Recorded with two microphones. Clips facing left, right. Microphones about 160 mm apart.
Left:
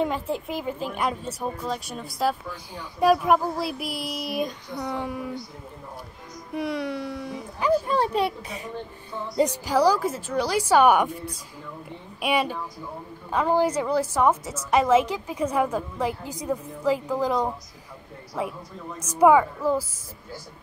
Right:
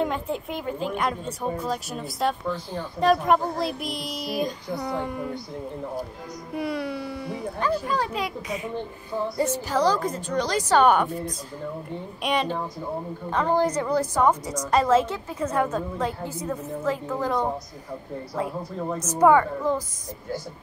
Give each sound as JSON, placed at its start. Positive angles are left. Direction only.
{"t": 0.0, "sound": "speech", "side_deg": 0}
{"t": 2.7, "sound": "speech", "side_deg": 10}
{"t": 6.5, "sound": "speech", "side_deg": 0}
{"t": 7.8, "sound": "a child's voice", "side_deg": 30}
{"t": 9.4, "sound": "a woman's voice", "side_deg": 15}
{"t": 12.2, "sound": "a woman's voice", "side_deg": 5}
{"t": 19.1, "sound": "a woman's voice", "side_deg": 10}